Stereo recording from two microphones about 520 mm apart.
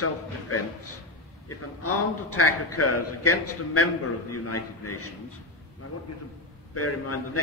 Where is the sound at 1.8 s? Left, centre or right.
Left.